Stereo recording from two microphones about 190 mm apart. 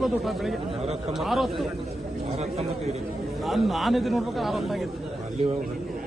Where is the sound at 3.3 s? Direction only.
Centre (ahead or behind).